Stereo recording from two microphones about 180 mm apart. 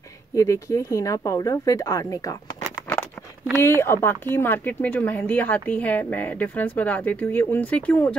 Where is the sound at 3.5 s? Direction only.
15° left (ahead or behind).